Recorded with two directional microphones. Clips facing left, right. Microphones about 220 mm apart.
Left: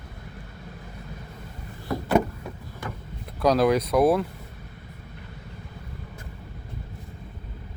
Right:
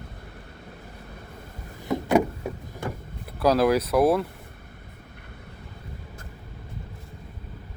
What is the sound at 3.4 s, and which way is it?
Speech, 5° right (ahead or behind).